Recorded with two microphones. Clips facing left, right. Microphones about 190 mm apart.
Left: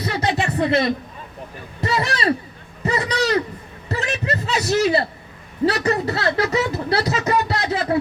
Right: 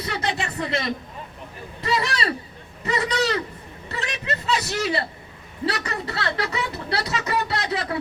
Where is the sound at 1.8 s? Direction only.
40° left (ahead or behind).